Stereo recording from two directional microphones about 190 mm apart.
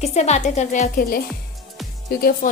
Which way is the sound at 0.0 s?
35° left (ahead or behind).